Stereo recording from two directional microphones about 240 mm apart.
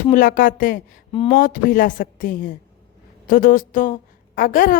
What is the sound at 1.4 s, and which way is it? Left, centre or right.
A woman's voice, left.